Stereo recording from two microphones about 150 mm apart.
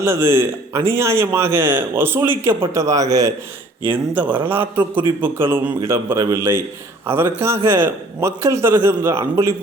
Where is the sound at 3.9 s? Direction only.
10° right (ahead or behind).